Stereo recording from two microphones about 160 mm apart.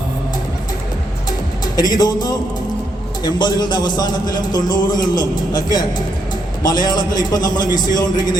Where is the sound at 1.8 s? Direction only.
25° left (ahead or behind).